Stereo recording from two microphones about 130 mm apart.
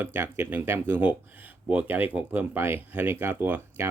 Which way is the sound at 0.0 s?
15° right (ahead or behind).